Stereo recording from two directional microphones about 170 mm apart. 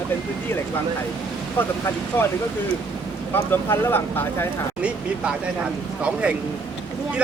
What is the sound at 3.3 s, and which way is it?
Speech, 10° left (ahead or behind).